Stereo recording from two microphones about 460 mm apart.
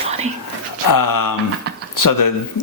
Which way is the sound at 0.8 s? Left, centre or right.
Left.